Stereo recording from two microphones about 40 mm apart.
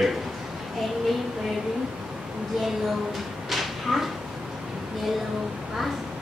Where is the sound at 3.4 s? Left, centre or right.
Centre.